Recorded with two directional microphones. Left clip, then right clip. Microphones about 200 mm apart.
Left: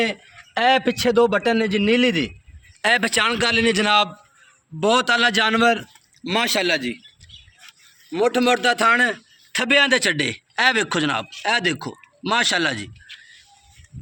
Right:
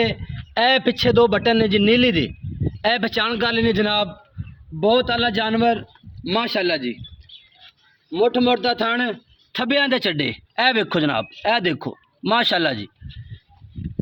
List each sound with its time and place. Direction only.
0.0 s a man's voice: 20° right (ahead or behind)
8.1 s a man's voice: 20° right (ahead or behind)